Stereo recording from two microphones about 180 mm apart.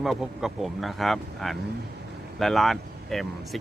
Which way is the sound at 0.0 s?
Centre (ahead or behind).